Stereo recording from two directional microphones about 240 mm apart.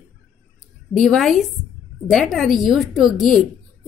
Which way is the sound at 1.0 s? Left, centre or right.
Centre.